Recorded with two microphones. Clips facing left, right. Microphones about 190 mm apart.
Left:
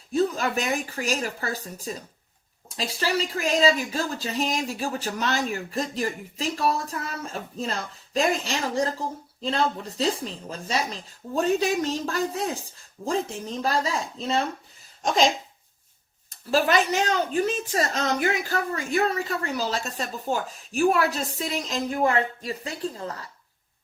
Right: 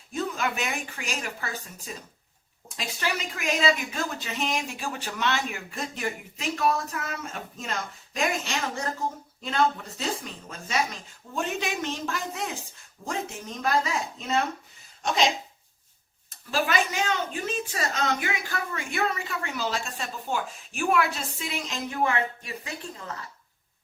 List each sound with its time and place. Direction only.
0.1 s a woman's voice: 35° left (ahead or behind)
16.5 s a woman's voice: 40° left (ahead or behind)